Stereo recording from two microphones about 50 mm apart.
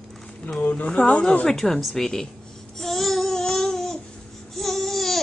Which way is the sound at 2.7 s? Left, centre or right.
Centre.